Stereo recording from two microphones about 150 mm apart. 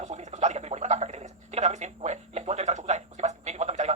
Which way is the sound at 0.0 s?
50° right (ahead or behind).